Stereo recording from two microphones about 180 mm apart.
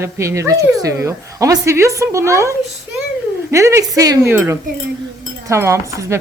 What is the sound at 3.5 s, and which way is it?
Speech, 15° right (ahead or behind).